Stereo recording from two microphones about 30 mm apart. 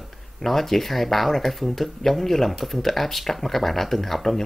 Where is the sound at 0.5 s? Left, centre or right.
Centre.